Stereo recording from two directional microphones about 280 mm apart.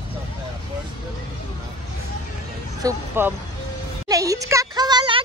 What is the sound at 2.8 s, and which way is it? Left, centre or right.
Speech, centre.